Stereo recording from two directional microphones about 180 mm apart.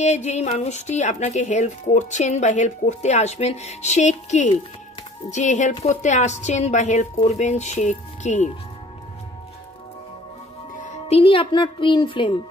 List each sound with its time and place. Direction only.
0.0 s speech: 40° left (ahead or behind)
10.7 s speech: 45° left (ahead or behind); by 12.4 s 25° left (ahead or behind)